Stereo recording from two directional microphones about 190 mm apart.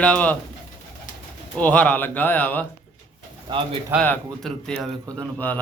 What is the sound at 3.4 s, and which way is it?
Speech, 30° right (ahead or behind).